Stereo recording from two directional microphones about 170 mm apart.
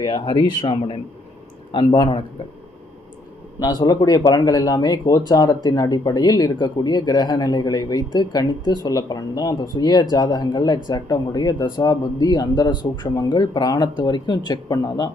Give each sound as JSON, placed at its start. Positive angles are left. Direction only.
{"t": 0.0, "sound": "speech", "side_deg": 30}
{"t": 3.6, "sound": "speech", "side_deg": 25}